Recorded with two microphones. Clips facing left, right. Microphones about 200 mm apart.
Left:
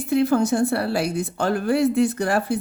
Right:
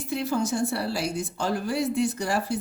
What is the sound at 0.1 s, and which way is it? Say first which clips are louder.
A woman's voice: left 8 dB; 55° left (ahead or behind).